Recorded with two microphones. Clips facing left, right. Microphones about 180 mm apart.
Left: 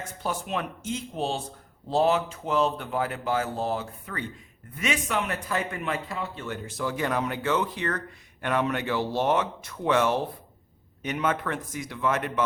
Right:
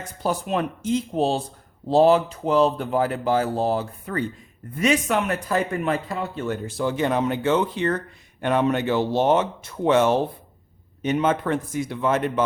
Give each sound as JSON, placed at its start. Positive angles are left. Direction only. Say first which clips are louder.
{"t": 0.2, "sound": "speech", "louder": "right 7 dB", "side_deg": -40}